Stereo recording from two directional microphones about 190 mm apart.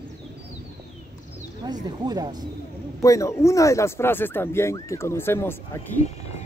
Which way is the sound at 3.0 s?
15° left (ahead or behind).